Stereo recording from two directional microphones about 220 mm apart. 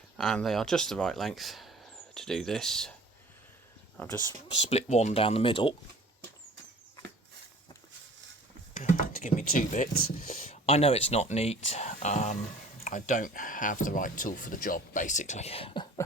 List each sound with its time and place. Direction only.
0.2 s speech: 5° left (ahead or behind)
3.9 s speech: 10° left (ahead or behind)
4.5 s speech: 30° left (ahead or behind)
8.7 s typing: 35° left (ahead or behind)
10.0 s speech: 40° left (ahead or behind); by 16.0 s 20° left (ahead or behind)